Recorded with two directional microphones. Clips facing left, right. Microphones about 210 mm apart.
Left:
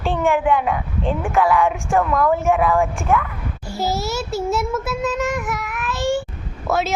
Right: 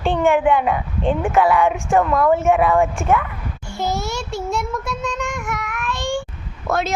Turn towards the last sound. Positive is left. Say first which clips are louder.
# left 1 dB
turn(degrees=5)  # may be behind; listen again after turning